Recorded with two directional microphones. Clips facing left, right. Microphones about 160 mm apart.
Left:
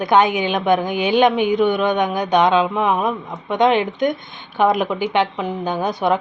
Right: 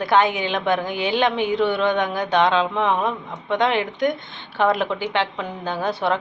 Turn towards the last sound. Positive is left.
turn(degrees=15)  # may be behind; listen again after turning